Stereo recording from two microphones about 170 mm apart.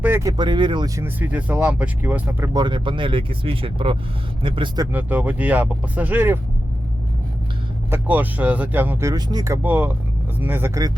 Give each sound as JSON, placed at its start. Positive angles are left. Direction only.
{"t": 0.0, "sound": "speech", "side_deg": -15}
{"t": 1.0, "sound": "speech", "side_deg": -10}
{"t": 2.5, "sound": "speech", "side_deg": -25}
{"t": 4.9, "sound": "speech", "side_deg": -10}
{"t": 7.9, "sound": "speech", "side_deg": -10}